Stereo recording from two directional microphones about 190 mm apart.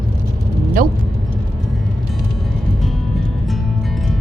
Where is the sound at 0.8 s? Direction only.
45° right (ahead or behind).